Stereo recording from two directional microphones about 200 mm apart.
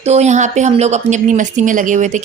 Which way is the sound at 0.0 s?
35° right (ahead or behind).